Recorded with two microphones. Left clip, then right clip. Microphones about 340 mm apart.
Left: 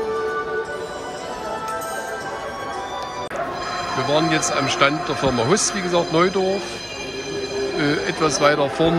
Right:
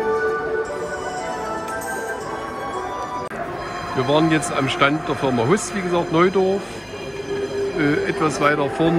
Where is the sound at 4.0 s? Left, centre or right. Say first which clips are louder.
Right 2 dB; centre.